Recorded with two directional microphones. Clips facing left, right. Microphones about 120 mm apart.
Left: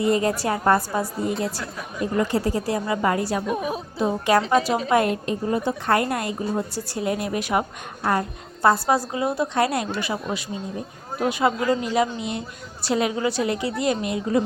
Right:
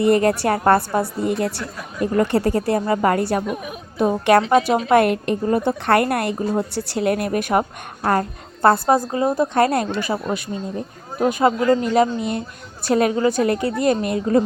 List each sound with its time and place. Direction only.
0.0 s a woman's voice: 60° right (ahead or behind)
4.4 s a woman's voice: 40° right (ahead or behind)
4.9 s a woman's voice: 65° right (ahead or behind)
8.6 s a woman's voice: 50° right (ahead or behind)